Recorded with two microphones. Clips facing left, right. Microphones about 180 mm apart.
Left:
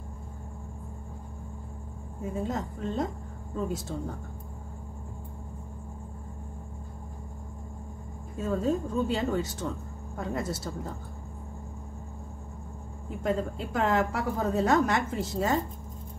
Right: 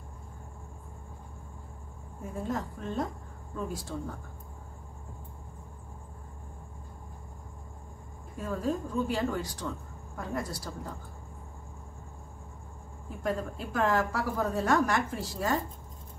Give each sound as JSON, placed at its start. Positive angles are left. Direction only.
{"t": 2.3, "sound": "a woman's voice", "side_deg": 20}
{"t": 8.4, "sound": "a woman's voice", "side_deg": 25}
{"t": 13.2, "sound": "a woman's voice", "side_deg": 25}